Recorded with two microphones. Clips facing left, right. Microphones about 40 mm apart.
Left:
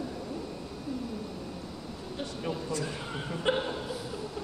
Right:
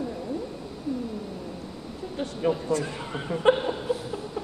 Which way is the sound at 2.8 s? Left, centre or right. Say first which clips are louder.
Right 4 dB; right.